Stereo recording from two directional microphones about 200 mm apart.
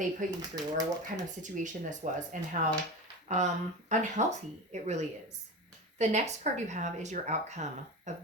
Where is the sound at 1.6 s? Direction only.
40° right (ahead or behind).